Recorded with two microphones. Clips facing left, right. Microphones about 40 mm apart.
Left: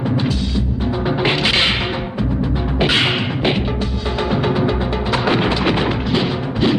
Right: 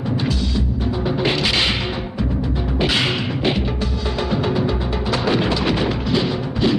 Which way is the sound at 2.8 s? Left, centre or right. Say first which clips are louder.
Left 3 dB; left.